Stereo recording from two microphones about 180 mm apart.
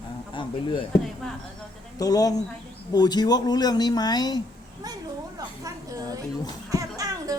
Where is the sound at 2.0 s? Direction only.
20° left (ahead or behind).